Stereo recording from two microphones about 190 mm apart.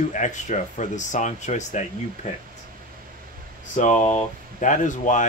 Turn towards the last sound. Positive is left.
turn(degrees=40)  # may be behind; listen again after turning